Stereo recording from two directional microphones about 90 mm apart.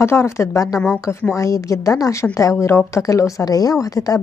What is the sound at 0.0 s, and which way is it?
Speech, 30° left (ahead or behind).